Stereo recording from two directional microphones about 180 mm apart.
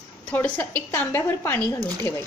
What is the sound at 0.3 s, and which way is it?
A woman's voice, 10° left (ahead or behind).